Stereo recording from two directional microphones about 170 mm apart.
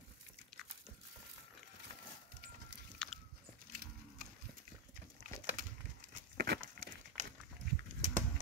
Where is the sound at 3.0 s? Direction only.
5° left (ahead or behind).